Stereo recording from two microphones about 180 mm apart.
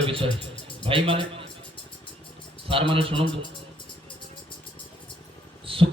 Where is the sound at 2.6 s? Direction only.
30° right (ahead or behind).